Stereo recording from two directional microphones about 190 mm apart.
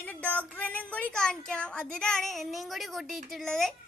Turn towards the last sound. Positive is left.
turn(degrees=0)  # may be behind; listen again after turning